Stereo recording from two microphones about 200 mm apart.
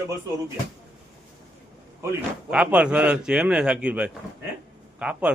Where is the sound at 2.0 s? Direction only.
10° right (ahead or behind).